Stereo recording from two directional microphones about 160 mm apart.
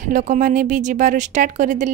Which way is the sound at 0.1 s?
55° right (ahead or behind).